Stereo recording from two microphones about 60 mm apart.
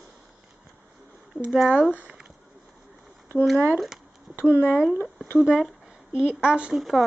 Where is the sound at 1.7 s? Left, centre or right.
Right.